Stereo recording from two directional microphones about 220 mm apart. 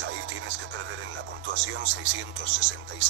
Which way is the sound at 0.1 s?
60° right (ahead or behind).